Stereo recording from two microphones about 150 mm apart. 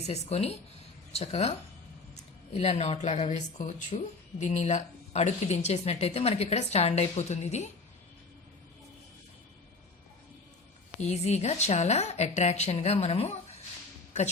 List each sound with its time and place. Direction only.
0.0 s speech: 45° left (ahead or behind)
2.6 s speech: 45° left (ahead or behind)
11.0 s speech: 45° left (ahead or behind)